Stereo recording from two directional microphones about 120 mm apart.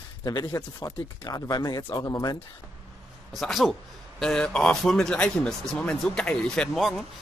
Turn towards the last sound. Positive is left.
turn(degrees=0)  # may be behind; listen again after turning